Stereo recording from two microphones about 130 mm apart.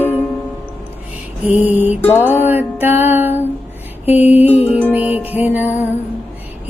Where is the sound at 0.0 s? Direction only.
15° left (ahead or behind).